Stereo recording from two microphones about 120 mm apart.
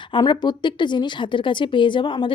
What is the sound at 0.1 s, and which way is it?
A woman's voice, 40° left (ahead or behind).